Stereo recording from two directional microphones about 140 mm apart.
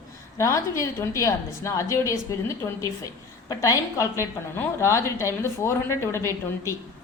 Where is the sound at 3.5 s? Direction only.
25° left (ahead or behind).